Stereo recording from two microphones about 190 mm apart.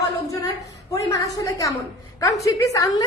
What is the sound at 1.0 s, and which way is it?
A woman's voice, 15° left (ahead or behind).